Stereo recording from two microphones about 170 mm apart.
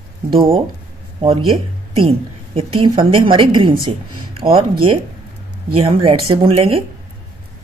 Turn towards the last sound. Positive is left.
turn(degrees=-35)  # may be behind; listen again after turning